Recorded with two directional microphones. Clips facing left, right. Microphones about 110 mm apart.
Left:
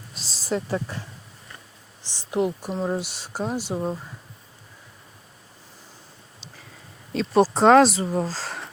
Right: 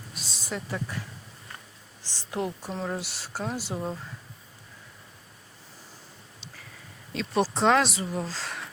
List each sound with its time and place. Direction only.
0.1 s a sound: 30° left (ahead or behind)
2.3 s speech: 15° left (ahead or behind)
7.1 s speech: 40° left (ahead or behind)